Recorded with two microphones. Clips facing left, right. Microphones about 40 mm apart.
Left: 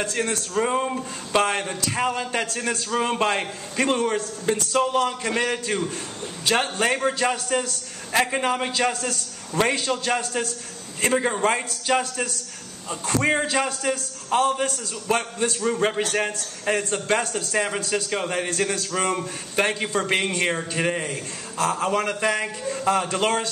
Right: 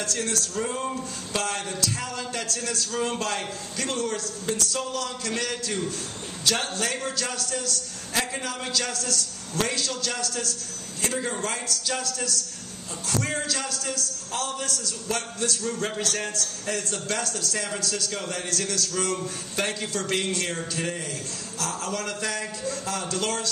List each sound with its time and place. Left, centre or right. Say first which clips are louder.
0.0 s a man's voice: left 3 dB; left